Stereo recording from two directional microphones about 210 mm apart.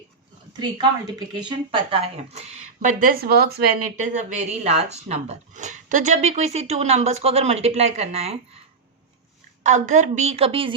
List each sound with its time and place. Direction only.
1.3 s speech: 20° right (ahead or behind)
9.6 s speech: 35° right (ahead or behind)